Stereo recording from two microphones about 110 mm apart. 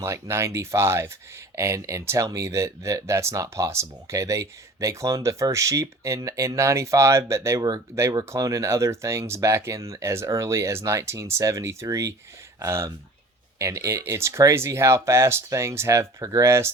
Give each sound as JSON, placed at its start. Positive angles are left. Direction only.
{"t": 0.0, "sound": "speech", "side_deg": -25}